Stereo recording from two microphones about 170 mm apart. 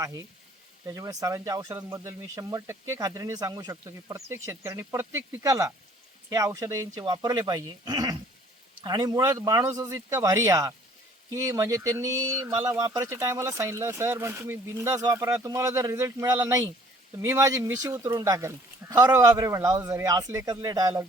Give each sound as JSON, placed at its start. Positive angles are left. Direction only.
{"t": 0.9, "sound": "speech", "side_deg": -20}